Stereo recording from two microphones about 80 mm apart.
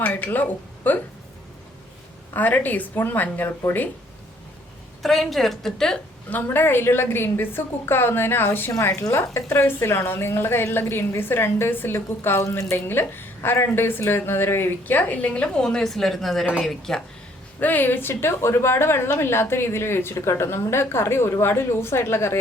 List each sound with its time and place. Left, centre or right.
0.0 s a woman's voice: centre
2.3 s a woman's voice: left
5.0 s a woman's voice: centre
6.3 s a woman's voice: left
12.4 s a woman's voice: left
12.7 s a woman's voice: left; by 17.0 s centre
17.6 s a woman's voice: left